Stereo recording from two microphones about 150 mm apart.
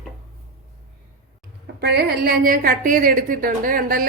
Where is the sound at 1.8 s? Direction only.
90° right.